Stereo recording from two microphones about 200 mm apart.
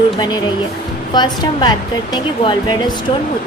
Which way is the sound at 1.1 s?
20° left (ahead or behind).